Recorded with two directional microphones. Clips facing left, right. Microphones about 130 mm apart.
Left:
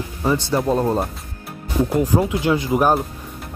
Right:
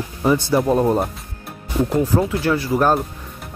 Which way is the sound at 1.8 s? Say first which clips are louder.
Even; 15° left (ahead or behind).